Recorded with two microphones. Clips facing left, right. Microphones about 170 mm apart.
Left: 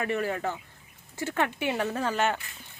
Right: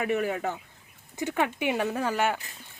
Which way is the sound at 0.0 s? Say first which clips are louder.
Right 2 dB; 10° right (ahead or behind).